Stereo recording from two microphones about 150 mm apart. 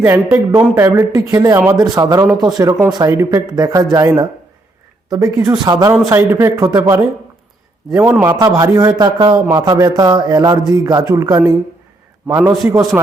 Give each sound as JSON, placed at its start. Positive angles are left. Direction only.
{"t": 0.0, "sound": "a man's voice", "side_deg": -15}
{"t": 7.9, "sound": "a man's voice", "side_deg": -10}
{"t": 12.9, "sound": "speech", "side_deg": -5}